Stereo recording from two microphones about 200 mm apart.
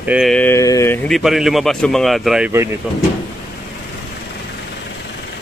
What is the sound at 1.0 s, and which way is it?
Speech, centre (ahead or behind).